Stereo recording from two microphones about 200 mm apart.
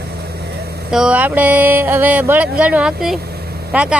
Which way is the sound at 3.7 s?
5° right (ahead or behind).